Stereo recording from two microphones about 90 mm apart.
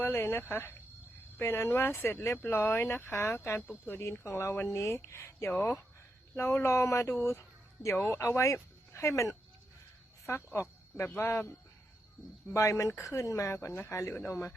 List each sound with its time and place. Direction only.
0.0 s speech: 25° left (ahead or behind)
7.2 s a sound: 30° left (ahead or behind)
7.9 s speech: 25° left (ahead or behind)